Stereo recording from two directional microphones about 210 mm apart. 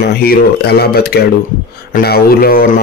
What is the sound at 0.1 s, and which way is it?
A man's voice, 45° left (ahead or behind).